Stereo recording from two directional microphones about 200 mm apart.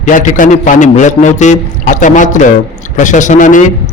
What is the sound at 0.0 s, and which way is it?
A man's voice, 40° left (ahead or behind).